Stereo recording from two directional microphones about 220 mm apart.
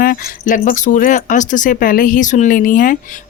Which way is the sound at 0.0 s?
40° left (ahead or behind).